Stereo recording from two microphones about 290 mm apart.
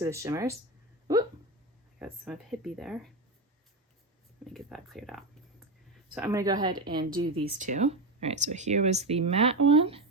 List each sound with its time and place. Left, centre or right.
0.0 s a woman's voice: centre
2.0 s speech: centre
4.4 s speech: centre
6.1 s a woman's voice: centre